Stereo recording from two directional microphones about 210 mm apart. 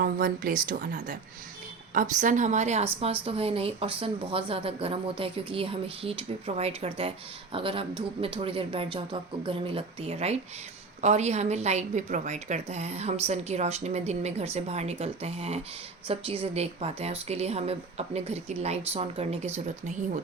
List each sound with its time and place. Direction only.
0.0 s a woman's voice: 45° right (ahead or behind)